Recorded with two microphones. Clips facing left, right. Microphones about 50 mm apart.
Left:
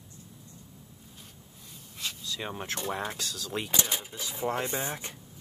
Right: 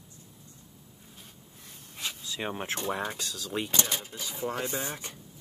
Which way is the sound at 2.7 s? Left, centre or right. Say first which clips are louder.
Left 1 dB; centre.